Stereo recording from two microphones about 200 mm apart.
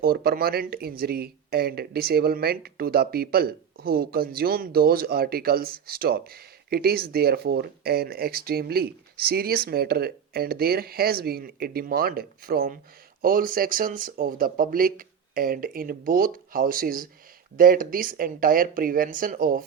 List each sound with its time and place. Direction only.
0.0 s speech: 50° right (ahead or behind)